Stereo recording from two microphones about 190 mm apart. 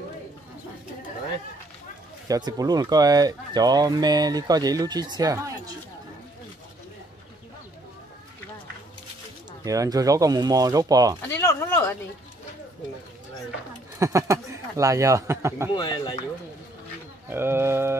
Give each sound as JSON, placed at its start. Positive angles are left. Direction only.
{"t": 2.2, "sound": "speech", "side_deg": -20}
{"t": 9.7, "sound": "speech", "side_deg": -20}
{"t": 11.2, "sound": "a sound", "side_deg": 10}
{"t": 13.9, "sound": "speech", "side_deg": -15}
{"t": 15.7, "sound": "speech", "side_deg": 20}
{"t": 17.3, "sound": "speech", "side_deg": -10}